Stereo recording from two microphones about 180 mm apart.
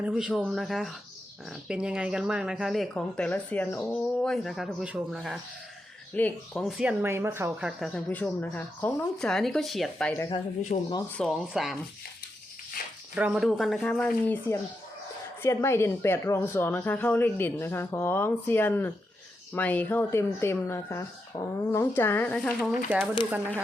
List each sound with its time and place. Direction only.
0.0 s speech: centre (ahead or behind)
6.1 s speech: 5° left (ahead or behind); by 7.7 s 10° right (ahead or behind)
7.8 s speech: 5° left (ahead or behind)
10.2 s speech: 25° left (ahead or behind)
10.7 s speech: 40° left (ahead or behind)
11.2 s speech: centre (ahead or behind)
13.1 s speech: 5° right (ahead or behind)